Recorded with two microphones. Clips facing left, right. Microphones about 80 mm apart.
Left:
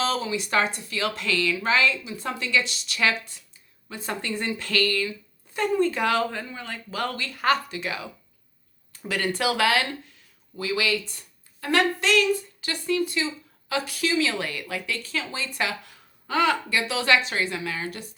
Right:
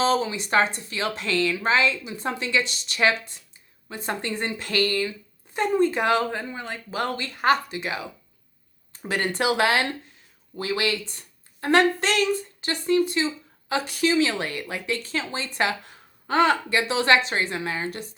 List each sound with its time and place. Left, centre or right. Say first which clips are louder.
0.0 s speech: right 4 dB; right
10.6 s speech: even; right